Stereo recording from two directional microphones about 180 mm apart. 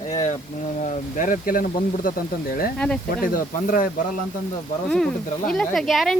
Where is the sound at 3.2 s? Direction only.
50° left (ahead or behind).